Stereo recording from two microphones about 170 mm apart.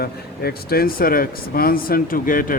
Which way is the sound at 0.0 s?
65° left (ahead or behind).